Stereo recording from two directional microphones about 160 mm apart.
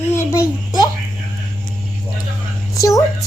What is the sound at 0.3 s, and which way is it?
Speech, 25° left (ahead or behind).